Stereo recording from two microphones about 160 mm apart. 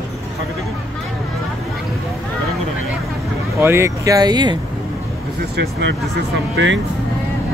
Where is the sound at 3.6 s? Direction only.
15° right (ahead or behind).